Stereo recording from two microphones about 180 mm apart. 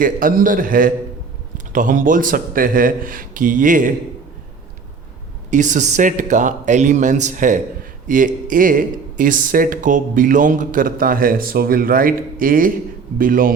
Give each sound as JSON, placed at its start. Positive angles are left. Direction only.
{"t": 0.0, "sound": "speech", "side_deg": -50}
{"t": 5.5, "sound": "speech", "side_deg": -45}